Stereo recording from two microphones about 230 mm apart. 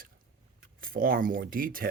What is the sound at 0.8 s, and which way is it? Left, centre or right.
Speech, right.